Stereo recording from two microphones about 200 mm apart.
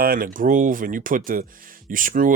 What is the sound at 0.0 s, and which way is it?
Speech, 45° right (ahead or behind).